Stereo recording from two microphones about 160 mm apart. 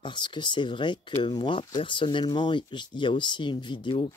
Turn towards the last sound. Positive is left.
turn(degrees=30)  # may be behind; listen again after turning